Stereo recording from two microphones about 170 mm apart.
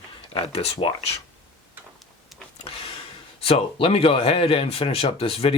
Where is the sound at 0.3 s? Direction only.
35° left (ahead or behind).